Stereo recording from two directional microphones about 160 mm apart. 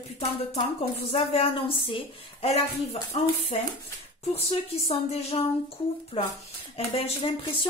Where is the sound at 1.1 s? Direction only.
35° left (ahead or behind).